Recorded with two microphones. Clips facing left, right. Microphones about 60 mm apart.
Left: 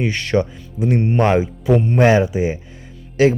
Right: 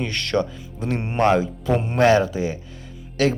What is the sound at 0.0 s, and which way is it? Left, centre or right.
Speech, centre.